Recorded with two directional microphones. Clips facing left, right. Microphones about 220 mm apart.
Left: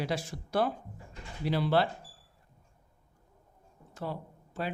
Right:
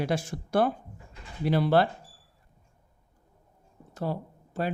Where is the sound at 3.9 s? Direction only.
40° right (ahead or behind).